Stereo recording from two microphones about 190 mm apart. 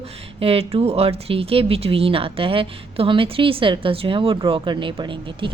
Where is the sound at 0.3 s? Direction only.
30° right (ahead or behind).